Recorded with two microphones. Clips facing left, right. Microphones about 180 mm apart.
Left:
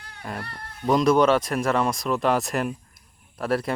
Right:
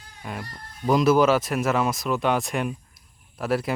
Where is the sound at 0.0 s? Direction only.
65° left (ahead or behind).